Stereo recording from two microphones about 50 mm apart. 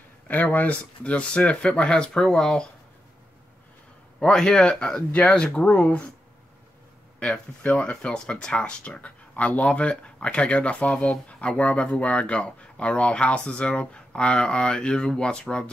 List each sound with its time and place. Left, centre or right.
0.3 s speech: left; by 2.7 s centre
4.2 s speech: centre
7.2 s speech: left